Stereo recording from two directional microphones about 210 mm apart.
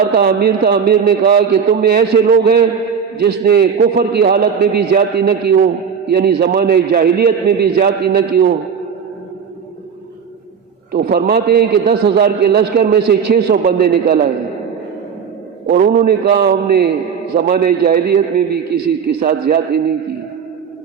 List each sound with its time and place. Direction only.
0.2 s a man's voice: 50° right (ahead or behind)
10.9 s a man's voice: 50° right (ahead or behind)
15.6 s a man's voice: 45° right (ahead or behind)